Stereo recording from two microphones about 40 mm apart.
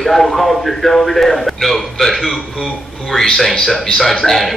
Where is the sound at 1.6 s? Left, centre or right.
Centre.